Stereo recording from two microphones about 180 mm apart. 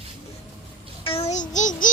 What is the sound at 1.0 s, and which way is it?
Speech, 35° left (ahead or behind).